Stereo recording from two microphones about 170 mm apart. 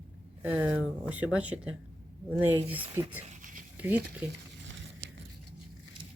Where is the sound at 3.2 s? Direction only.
50° right (ahead or behind).